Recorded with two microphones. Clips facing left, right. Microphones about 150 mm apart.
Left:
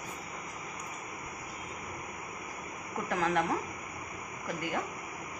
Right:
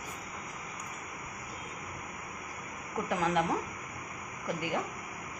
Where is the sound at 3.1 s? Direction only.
15° right (ahead or behind).